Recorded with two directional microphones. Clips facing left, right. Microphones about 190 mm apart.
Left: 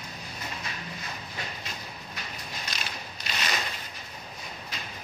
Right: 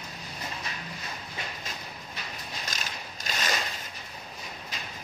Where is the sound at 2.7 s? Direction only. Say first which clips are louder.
Even; 45° right (ahead or behind).